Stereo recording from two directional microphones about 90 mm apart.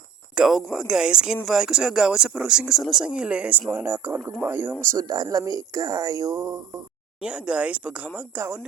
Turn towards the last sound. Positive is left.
turn(degrees=-15)  # may be behind; listen again after turning